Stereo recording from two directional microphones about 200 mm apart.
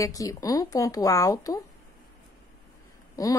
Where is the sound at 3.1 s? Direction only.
15° left (ahead or behind).